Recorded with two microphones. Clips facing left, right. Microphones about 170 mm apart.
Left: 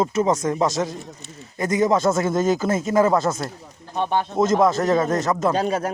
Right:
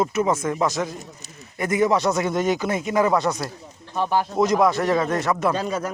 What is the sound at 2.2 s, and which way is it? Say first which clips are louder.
Speech: left 2 dB; 45° left (ahead or behind).